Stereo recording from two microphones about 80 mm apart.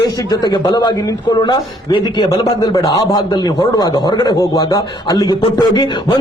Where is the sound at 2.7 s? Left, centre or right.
Left.